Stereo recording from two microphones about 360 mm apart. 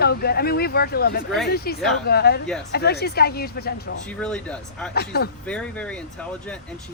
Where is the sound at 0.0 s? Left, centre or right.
Left.